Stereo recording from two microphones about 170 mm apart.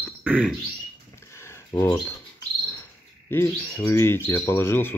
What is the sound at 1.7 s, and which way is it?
Speech, 25° left (ahead or behind).